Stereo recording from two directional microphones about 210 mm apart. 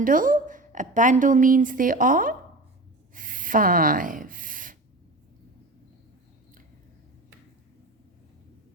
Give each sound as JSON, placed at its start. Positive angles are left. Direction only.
{"t": 0.0, "sound": "a woman's voice", "side_deg": -40}
{"t": 3.2, "sound": "gasp", "side_deg": -40}